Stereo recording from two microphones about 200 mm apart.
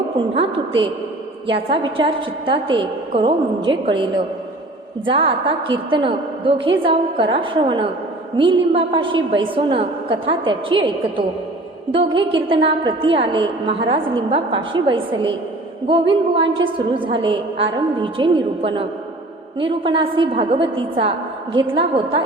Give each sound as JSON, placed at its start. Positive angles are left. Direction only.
{"t": 0.3, "sound": "a woman's voice", "side_deg": -25}
{"t": 5.0, "sound": "a woman's voice", "side_deg": -25}